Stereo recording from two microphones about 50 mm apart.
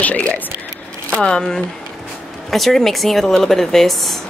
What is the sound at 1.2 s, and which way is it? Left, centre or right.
Speech, centre.